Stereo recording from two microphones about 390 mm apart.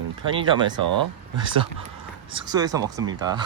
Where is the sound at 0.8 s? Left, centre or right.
Right.